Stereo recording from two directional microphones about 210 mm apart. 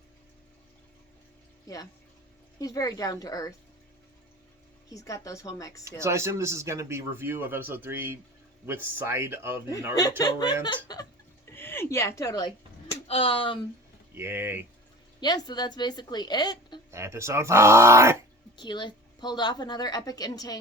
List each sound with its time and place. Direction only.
1.6 s speech: 15° left (ahead or behind)
4.9 s speech: 15° left (ahead or behind)
6.0 s speech: 15° right (ahead or behind)
10.4 s a woman's voice: 20° left (ahead or behind)
14.2 s speech: 10° right (ahead or behind)
15.2 s a woman's voice: 20° left (ahead or behind)
16.9 s speech: 15° right (ahead or behind)
18.5 s a woman's voice: 20° left (ahead or behind)